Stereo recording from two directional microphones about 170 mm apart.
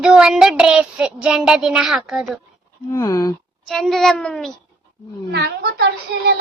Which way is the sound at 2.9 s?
20° left (ahead or behind).